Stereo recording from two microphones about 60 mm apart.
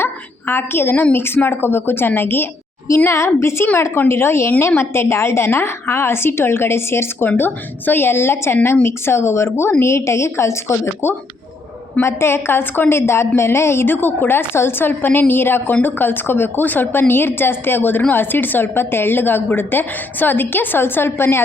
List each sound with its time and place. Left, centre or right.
0.0 s a sound: left
1.1 s a woman's voice: left
3.6 s a woman's voice: left